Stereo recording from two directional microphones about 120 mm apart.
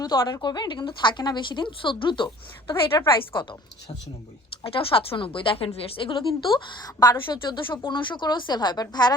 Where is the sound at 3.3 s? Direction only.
45° left (ahead or behind).